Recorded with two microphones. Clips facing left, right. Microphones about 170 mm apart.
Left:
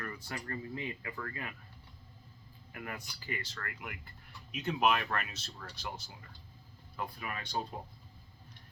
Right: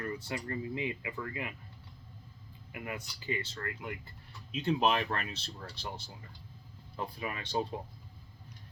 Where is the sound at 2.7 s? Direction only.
20° right (ahead or behind).